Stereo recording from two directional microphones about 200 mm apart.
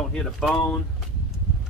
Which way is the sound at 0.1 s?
5° left (ahead or behind).